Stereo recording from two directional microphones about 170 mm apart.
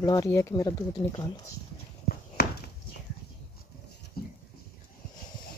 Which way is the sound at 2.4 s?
70° left (ahead or behind).